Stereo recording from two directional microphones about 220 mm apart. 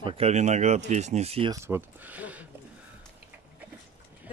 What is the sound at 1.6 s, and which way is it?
Speech, 10° right (ahead or behind).